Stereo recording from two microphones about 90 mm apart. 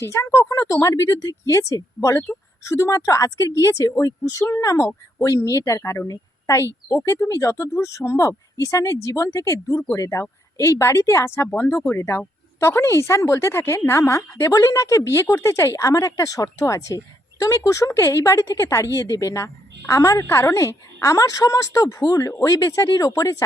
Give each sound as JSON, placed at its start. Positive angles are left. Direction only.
{"t": 0.0, "sound": "speech", "side_deg": 30}